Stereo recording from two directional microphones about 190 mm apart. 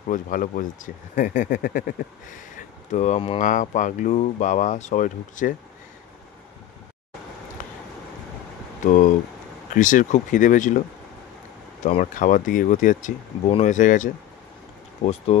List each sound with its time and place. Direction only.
0.1 s speech: 45° left (ahead or behind)
7.6 s a sound: 45° left (ahead or behind)
8.8 s speech: 40° left (ahead or behind)
11.8 s speech: 40° left (ahead or behind)